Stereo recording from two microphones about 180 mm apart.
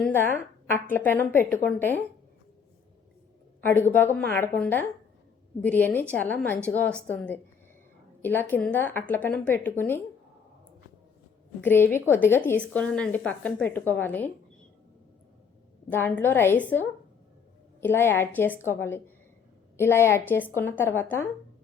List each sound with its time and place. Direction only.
0.0 s a woman's voice: 10° left (ahead or behind)
3.6 s a woman's voice: 10° left (ahead or behind)
11.6 s a woman's voice: 10° left (ahead or behind)
15.9 s a woman's voice: 10° left (ahead or behind)